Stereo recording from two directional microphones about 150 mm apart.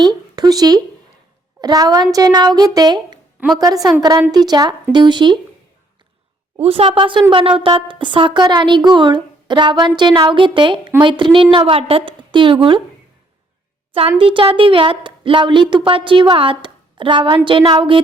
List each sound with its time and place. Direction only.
0.0 s a woman's voice: 30° right (ahead or behind)
6.6 s a woman's voice: 40° right (ahead or behind)
14.2 s a woman's voice: 35° right (ahead or behind)